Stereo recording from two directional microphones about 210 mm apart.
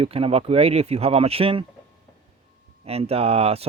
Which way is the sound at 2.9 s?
30° right (ahead or behind).